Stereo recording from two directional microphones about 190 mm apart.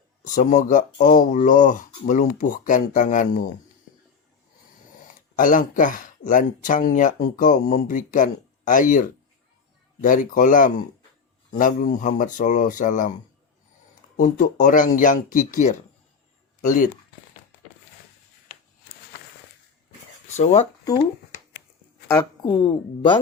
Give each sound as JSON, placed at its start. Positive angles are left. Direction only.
{"t": 0.3, "sound": "speech", "side_deg": 40}
{"t": 5.0, "sound": "speech", "side_deg": 45}
{"t": 14.2, "sound": "speech", "side_deg": 40}
{"t": 20.3, "sound": "speech", "side_deg": 35}
{"t": 22.0, "sound": "speech", "side_deg": 20}